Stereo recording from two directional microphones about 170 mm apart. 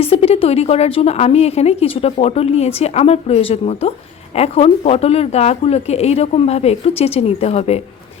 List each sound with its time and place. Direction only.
0.0 s a woman's voice: 35° left (ahead or behind)